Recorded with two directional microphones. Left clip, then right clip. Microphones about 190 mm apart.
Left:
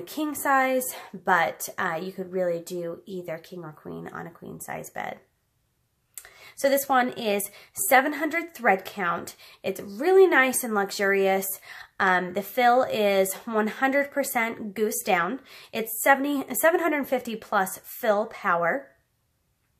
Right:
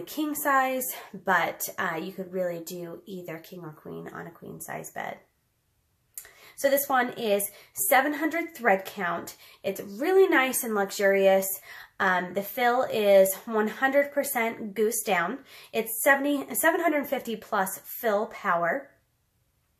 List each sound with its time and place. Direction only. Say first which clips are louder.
0.0 s a woman's voice: left 1 dB; 45° left (ahead or behind)
6.4 s a woman's voice: left 1 dB; 45° left (ahead or behind)